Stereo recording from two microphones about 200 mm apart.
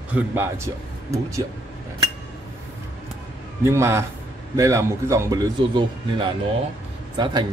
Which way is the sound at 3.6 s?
15° right (ahead or behind).